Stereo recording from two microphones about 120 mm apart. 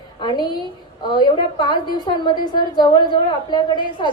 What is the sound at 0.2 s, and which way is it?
A woman's voice, 35° left (ahead or behind).